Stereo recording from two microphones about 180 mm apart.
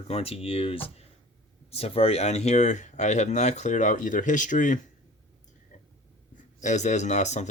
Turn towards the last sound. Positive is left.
turn(degrees=40)  # may be behind; listen again after turning